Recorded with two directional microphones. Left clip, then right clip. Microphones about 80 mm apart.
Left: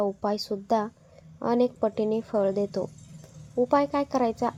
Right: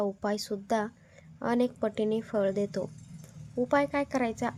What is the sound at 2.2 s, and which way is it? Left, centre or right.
A woman's voice, centre.